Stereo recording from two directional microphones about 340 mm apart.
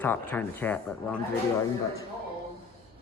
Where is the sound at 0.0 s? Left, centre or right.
Centre.